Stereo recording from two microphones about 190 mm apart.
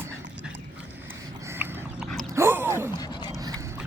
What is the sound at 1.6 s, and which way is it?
Pig, centre (ahead or behind).